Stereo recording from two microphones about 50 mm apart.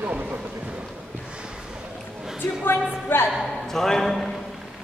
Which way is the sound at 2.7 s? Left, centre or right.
Left.